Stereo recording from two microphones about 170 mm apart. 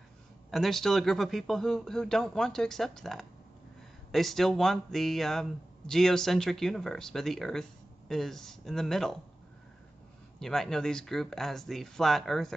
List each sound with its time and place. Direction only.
0.5 s speech: centre (ahead or behind)
10.4 s speech: centre (ahead or behind)